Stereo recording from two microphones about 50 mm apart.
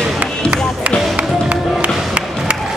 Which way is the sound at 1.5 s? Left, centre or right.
Right.